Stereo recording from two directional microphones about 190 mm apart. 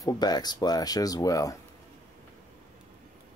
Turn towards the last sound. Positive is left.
turn(degrees=20)  # may be behind; listen again after turning